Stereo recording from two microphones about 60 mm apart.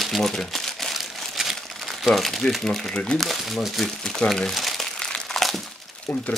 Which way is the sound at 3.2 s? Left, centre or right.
Centre.